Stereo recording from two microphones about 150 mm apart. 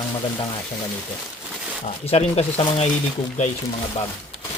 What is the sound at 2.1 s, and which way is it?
Speech, 45° left (ahead or behind).